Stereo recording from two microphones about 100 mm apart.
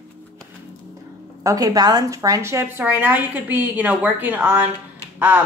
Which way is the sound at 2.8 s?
20° right (ahead or behind).